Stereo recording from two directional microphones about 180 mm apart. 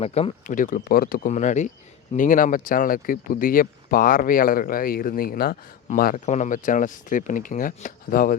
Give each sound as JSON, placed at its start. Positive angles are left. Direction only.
{"t": 0.0, "sound": "speech", "side_deg": 35}